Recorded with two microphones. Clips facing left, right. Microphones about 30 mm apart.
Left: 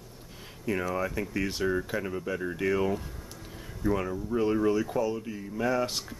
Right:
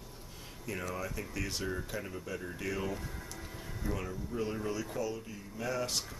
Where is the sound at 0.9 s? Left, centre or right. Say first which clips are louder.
Left 8 dB; left.